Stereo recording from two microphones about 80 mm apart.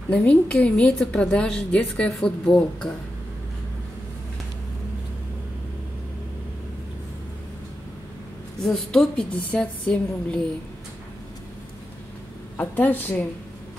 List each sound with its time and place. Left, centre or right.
0.1 s a woman's voice: centre
8.6 s a woman's voice: centre
12.5 s a woman's voice: left